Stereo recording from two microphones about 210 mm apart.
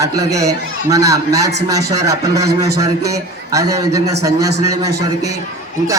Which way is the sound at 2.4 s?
50° right (ahead or behind).